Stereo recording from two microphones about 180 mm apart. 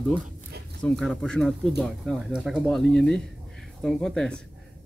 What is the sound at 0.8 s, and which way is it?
Speech, 5° left (ahead or behind).